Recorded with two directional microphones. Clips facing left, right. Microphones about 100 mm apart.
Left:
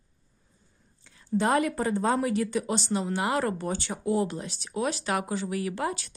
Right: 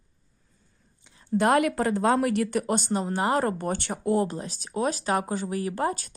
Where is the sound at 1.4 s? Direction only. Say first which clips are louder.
Right 3 dB; 70° right (ahead or behind); by 3.7 s 40° right (ahead or behind).